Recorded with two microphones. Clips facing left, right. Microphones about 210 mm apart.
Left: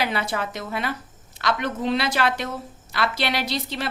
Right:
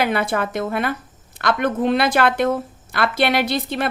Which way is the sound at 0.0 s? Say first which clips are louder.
Right 5 dB; 55° right (ahead or behind).